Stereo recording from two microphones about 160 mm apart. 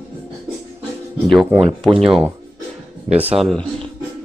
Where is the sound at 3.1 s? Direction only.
5° right (ahead or behind).